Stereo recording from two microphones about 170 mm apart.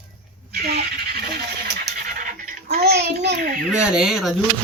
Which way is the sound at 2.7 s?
70° right (ahead or behind).